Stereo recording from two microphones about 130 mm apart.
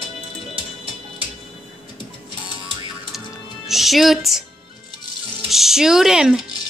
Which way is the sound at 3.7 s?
Centre (ahead or behind).